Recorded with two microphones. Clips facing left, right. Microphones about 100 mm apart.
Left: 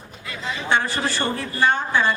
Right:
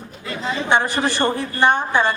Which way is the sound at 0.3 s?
35° right (ahead or behind).